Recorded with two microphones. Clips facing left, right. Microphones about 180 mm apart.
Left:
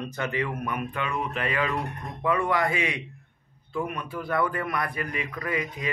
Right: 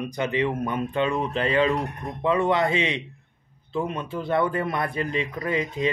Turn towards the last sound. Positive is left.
turn(degrees=-25)  # may be behind; listen again after turning